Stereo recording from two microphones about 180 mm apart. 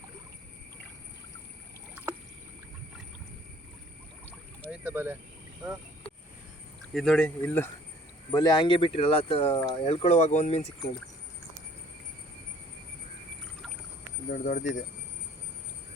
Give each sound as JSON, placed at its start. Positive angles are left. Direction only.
{"t": 4.7, "sound": "speech", "side_deg": -10}
{"t": 6.9, "sound": "speech", "side_deg": 5}
{"t": 8.3, "sound": "speech", "side_deg": 25}
{"t": 9.6, "sound": "speech", "side_deg": 20}
{"t": 9.8, "sound": "speech", "side_deg": 35}
{"t": 14.3, "sound": "speech", "side_deg": 45}